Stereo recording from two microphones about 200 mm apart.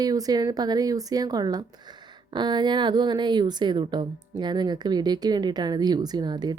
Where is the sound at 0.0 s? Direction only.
20° right (ahead or behind).